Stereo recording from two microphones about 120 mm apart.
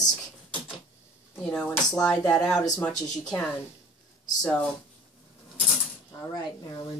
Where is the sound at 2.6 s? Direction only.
30° left (ahead or behind).